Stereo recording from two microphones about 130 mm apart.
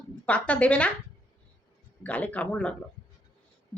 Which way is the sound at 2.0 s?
10° left (ahead or behind).